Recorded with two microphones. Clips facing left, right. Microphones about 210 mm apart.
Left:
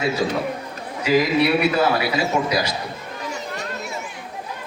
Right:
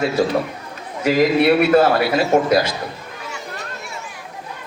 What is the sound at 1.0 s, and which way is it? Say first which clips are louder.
A man's voice: right 3 dB; 50° right (ahead or behind).